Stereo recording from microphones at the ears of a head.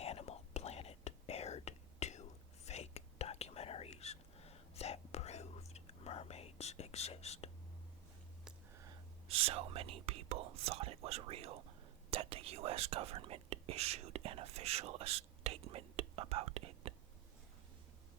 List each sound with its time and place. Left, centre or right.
0.0 s whispering: left
8.8 s whispering: right